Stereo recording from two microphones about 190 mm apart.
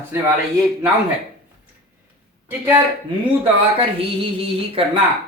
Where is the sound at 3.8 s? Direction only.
30° right (ahead or behind).